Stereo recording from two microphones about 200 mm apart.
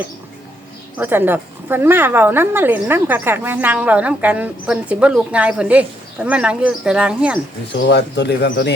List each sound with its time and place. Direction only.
0.9 s a woman's voice: 10° right (ahead or behind)
7.9 s speech: 60° left (ahead or behind)